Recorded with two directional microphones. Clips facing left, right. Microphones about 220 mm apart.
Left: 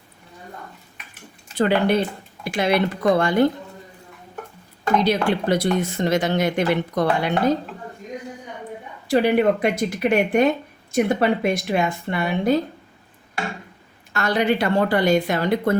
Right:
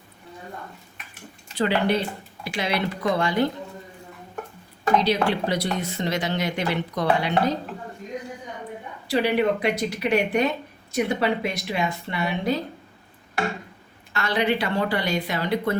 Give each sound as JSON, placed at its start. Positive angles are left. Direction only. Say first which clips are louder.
{"t": 1.5, "sound": "a woman's voice", "louder": "left 4 dB", "side_deg": 50}
{"t": 5.0, "sound": "a woman's voice", "louder": "left 3 dB", "side_deg": 50}
{"t": 9.0, "sound": "a woman's voice", "louder": "left 4 dB", "side_deg": 50}
{"t": 14.1, "sound": "a woman's voice", "louder": "left 3 dB", "side_deg": 45}